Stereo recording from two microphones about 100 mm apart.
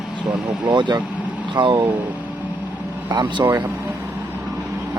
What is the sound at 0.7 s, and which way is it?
Speech, 50° right (ahead or behind).